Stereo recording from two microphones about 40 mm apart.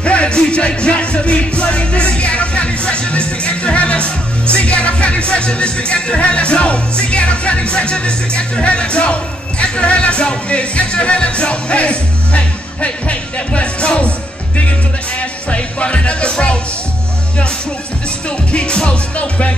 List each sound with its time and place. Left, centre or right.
0.0 s music: left
12.8 s speech: left
15.1 s speech: left
18.5 s speech: left